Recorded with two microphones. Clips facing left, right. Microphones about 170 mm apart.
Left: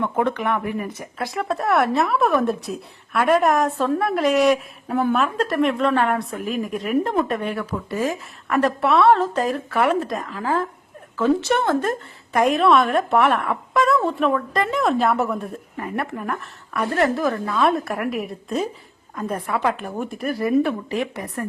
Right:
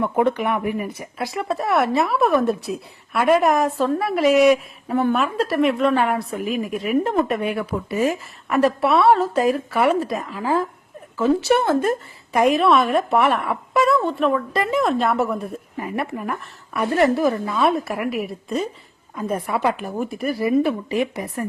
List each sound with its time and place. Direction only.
0.0 s speech: 10° right (ahead or behind)
19.1 s speech: 10° right (ahead or behind)